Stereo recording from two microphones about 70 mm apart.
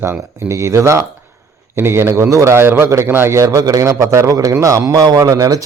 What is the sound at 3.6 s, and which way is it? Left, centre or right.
A man's voice, right.